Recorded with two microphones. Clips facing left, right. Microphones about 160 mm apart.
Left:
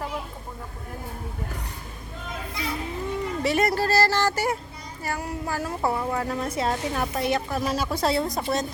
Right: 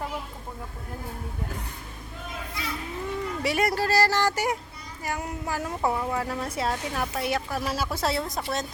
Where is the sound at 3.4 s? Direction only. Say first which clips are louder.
Left 2 dB; 10° right (ahead or behind).